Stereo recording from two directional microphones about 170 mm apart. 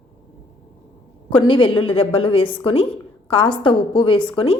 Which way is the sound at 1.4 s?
30° left (ahead or behind).